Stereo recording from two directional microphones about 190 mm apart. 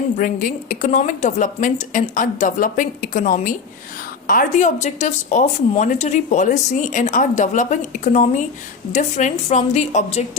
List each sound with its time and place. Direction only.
0.2 s a woman's voice: 45° left (ahead or behind)